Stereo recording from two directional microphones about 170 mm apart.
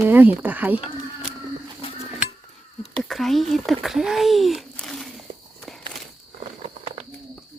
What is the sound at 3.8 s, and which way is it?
A child's voice, centre (ahead or behind).